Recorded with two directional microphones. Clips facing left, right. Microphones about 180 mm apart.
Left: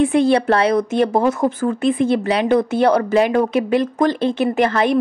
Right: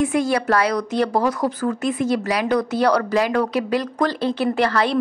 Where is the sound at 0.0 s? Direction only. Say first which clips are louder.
Left 5 dB; 30° left (ahead or behind).